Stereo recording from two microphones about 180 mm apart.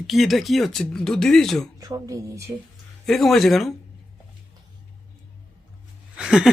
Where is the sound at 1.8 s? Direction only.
20° right (ahead or behind).